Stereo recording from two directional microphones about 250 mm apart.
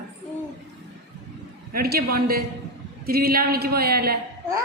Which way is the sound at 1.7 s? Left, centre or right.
Right.